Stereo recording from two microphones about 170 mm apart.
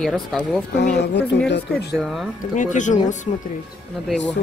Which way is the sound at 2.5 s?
45° left (ahead or behind).